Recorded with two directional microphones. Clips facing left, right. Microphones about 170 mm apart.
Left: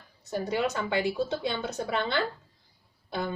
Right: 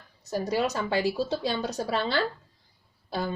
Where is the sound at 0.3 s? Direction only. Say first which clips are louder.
Right 2 dB; 40° right (ahead or behind).